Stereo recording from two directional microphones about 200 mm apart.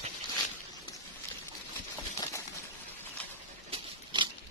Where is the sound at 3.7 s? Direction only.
25° right (ahead or behind).